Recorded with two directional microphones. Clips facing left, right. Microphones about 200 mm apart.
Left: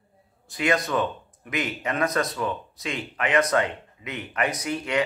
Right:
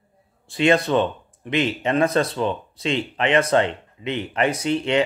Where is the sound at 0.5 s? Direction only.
30° right (ahead or behind).